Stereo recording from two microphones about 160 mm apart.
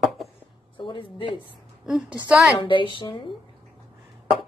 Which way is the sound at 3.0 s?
30° left (ahead or behind).